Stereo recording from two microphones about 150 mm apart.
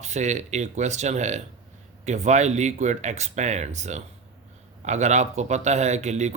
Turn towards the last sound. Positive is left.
turn(degrees=-50)  # may be behind; listen again after turning